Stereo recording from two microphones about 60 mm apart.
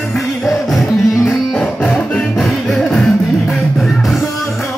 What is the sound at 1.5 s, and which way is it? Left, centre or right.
Music, centre.